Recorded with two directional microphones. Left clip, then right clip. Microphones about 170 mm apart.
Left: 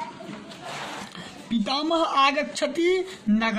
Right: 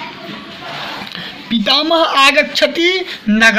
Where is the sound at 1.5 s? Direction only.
15° right (ahead or behind).